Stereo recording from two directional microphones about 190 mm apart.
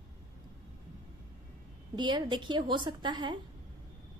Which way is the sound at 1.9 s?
25° right (ahead or behind).